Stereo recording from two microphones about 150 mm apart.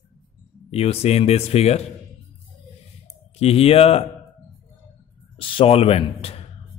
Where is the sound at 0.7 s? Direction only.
45° left (ahead or behind).